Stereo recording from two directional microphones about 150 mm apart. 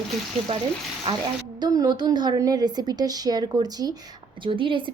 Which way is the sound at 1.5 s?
25° right (ahead or behind).